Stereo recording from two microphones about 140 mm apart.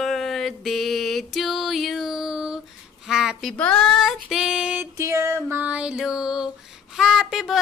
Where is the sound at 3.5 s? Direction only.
10° left (ahead or behind).